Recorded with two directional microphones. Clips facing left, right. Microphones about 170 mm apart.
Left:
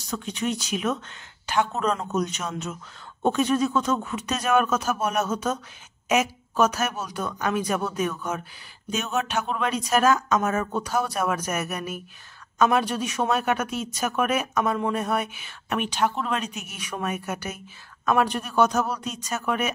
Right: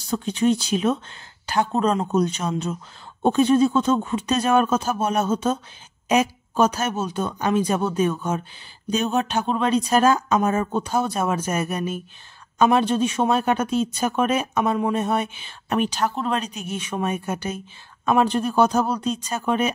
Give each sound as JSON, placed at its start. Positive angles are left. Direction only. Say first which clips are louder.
{"t": 0.1, "sound": "speech", "louder": "right 8 dB", "side_deg": -30}